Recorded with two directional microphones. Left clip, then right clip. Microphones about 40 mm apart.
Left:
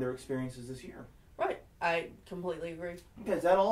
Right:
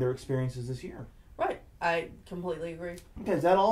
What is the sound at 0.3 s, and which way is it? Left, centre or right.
Speech, right.